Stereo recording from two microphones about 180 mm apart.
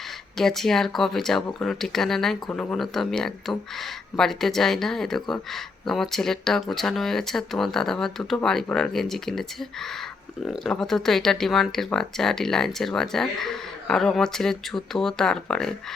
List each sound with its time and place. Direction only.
0.3 s speech: centre (ahead or behind)